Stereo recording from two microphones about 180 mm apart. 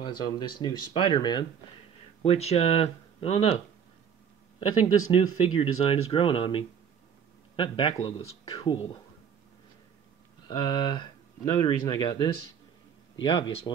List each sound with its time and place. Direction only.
0.0 s speech: 25° left (ahead or behind)
5.1 s speech: 30° left (ahead or behind)
10.5 s speech: 25° left (ahead or behind)